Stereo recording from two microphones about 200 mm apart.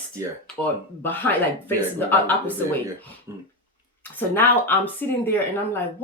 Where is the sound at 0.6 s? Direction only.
10° left (ahead or behind).